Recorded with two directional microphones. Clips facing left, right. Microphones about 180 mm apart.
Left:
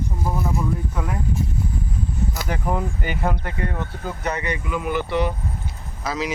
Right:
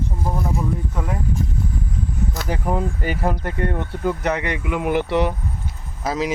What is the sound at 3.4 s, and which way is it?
Speech, 50° right (ahead or behind).